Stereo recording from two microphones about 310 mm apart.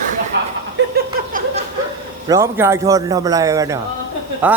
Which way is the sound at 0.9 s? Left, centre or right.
Right.